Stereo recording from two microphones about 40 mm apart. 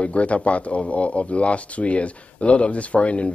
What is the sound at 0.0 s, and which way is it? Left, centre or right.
Speech, left.